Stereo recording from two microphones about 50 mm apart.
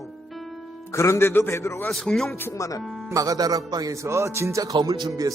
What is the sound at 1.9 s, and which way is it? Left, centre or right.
Speech, centre.